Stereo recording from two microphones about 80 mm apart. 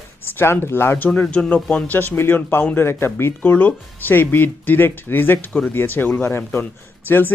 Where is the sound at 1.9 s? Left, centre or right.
Left.